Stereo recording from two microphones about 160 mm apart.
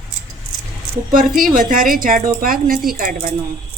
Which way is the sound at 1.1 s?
60° right (ahead or behind).